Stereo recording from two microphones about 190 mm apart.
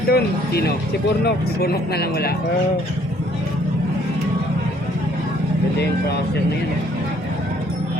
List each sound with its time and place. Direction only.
0.1 s speech: 55° left (ahead or behind)